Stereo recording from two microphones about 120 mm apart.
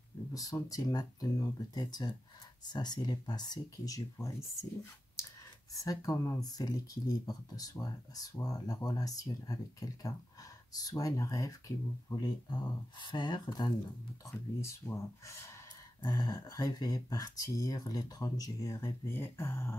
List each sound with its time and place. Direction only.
0.3 s speech: 30° left (ahead or behind)
5.9 s speech: 30° left (ahead or behind)
14.6 s speech: 25° left (ahead or behind)